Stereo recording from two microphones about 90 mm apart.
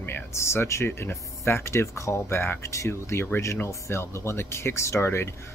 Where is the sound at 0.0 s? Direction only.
30° left (ahead or behind).